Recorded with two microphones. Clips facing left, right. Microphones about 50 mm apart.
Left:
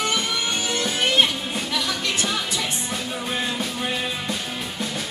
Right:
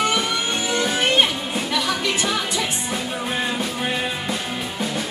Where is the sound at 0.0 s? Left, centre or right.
Centre.